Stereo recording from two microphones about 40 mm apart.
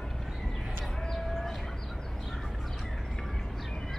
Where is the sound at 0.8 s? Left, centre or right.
Centre.